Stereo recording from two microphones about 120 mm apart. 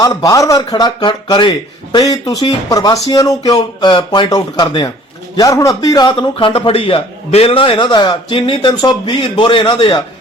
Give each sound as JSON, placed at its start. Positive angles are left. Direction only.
{"t": 0.0, "sound": "speech", "side_deg": 30}
{"t": 5.4, "sound": "a man's voice", "side_deg": 30}